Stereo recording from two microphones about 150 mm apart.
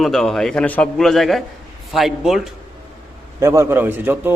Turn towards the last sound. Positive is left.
turn(degrees=-15)  # may be behind; listen again after turning